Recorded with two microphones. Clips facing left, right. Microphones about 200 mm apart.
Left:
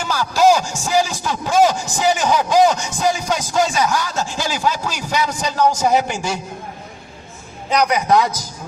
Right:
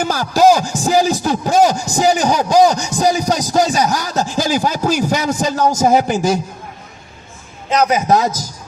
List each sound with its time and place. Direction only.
0.0 s a man's voice: 45° right (ahead or behind)
7.8 s a man's voice: 25° right (ahead or behind)